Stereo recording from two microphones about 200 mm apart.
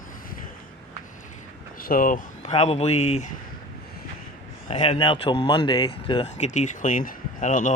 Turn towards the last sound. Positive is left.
turn(degrees=40)  # may be behind; listen again after turning